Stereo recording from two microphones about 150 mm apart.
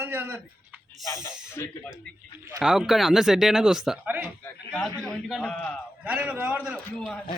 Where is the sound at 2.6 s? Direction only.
Centre (ahead or behind).